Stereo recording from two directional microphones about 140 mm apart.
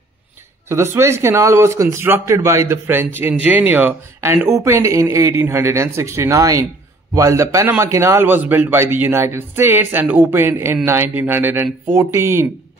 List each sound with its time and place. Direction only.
0.7 s a man's voice: 20° right (ahead or behind)